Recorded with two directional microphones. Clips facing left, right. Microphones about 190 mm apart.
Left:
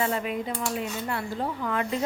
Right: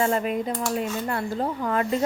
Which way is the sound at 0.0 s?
45° right (ahead or behind).